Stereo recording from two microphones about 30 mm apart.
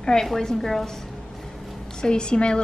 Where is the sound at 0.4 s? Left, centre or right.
Centre.